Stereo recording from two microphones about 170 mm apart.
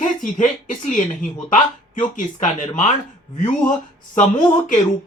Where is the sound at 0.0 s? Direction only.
50° left (ahead or behind).